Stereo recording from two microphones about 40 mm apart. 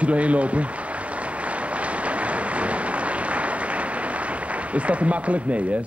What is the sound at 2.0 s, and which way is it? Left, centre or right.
Applause, right.